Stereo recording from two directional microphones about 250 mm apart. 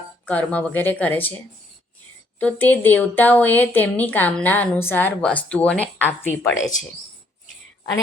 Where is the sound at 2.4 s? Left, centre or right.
Centre.